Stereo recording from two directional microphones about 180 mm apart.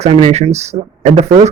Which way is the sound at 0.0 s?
35° right (ahead or behind).